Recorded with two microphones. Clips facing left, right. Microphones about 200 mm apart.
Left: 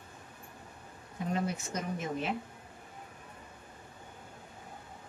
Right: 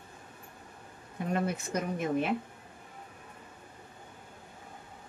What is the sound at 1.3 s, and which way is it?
Speech, 55° right (ahead or behind).